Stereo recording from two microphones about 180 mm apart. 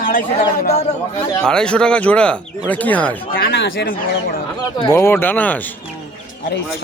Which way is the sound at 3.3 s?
65° left (ahead or behind).